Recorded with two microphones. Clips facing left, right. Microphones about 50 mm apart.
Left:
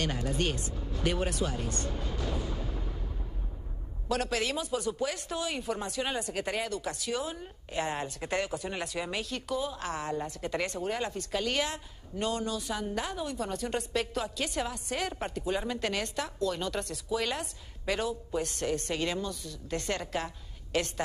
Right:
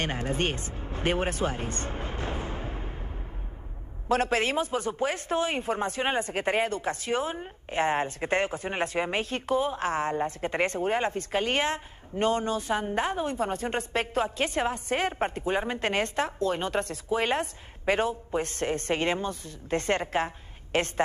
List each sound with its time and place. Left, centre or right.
0.0 s music: right
4.1 s speech: right